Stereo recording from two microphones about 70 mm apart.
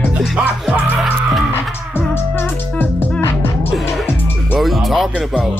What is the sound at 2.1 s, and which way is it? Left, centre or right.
Music, left.